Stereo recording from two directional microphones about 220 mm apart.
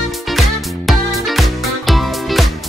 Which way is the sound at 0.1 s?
Centre (ahead or behind).